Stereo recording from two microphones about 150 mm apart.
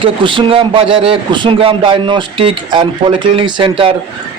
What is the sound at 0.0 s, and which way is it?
A man's voice, 35° right (ahead or behind).